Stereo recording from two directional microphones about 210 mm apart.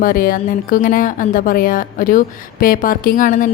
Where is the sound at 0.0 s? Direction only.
40° left (ahead or behind).